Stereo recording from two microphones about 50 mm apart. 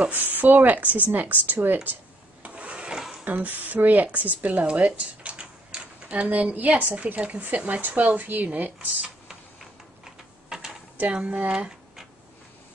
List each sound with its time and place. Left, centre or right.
0.1 s speech: right
2.4 s wood: right
2.9 s a sound: centre
3.3 s speech: right
6.5 s a woman's voice: right
8.7 s a sound: centre
11.2 s a woman's voice: right